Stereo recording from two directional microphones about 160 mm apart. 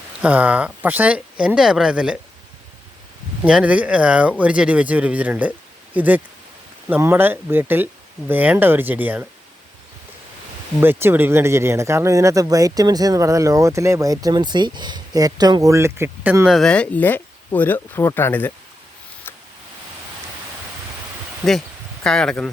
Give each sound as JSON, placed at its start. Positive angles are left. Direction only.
{"t": 0.2, "sound": "speech", "side_deg": -10}
{"t": 3.4, "sound": "speech", "side_deg": -10}
{"t": 10.8, "sound": "speech", "side_deg": -15}
{"t": 16.5, "sound": "speech", "side_deg": 5}
{"t": 22.0, "sound": "speech", "side_deg": 5}